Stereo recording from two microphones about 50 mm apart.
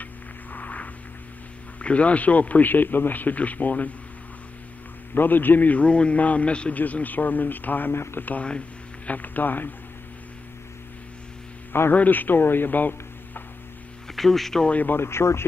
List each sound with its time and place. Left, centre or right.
0.0 s a sound: left
1.8 s a man's voice: left
5.1 s a man's voice: left
7.9 s speech: left
8.2 s a man's voice: left
11.9 s speech: left
14.1 s speech: centre
15.0 s speech: left